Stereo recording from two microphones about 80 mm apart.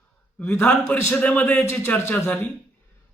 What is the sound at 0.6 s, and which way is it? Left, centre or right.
A man's voice, centre.